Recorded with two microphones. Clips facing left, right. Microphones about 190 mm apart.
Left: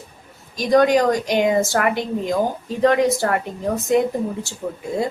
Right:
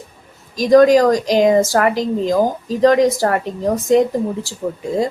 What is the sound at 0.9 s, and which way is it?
Speech, 40° right (ahead or behind).